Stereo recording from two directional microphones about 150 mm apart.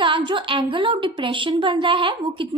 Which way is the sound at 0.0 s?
35° right (ahead or behind).